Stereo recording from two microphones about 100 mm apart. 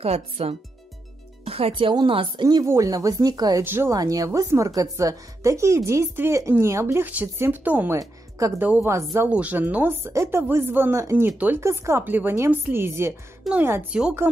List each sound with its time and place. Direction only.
0.0 s speech: 90° right
1.4 s speech: 75° right (ahead or behind); by 2.6 s 50° right (ahead or behind)
2.6 s speech: 35° right (ahead or behind)
3.6 s a woman's voice: 25° right (ahead or behind)
3.9 s a woman's voice: 35° right (ahead or behind); by 8.0 s 20° right (ahead or behind)
8.0 s speech: 35° right (ahead or behind)
8.5 s a woman's voice: 15° right (ahead or behind); by 11.2 s 30° right (ahead or behind)
11.2 s speech: 15° right (ahead or behind)
11.6 s a woman's voice: 30° right (ahead or behind)
12.0 s a woman's voice: 20° right (ahead or behind)